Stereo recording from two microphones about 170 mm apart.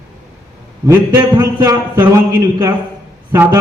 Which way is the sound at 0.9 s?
15° right (ahead or behind).